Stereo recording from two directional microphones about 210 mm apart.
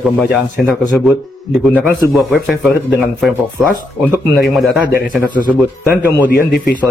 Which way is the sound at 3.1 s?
Centre (ahead or behind).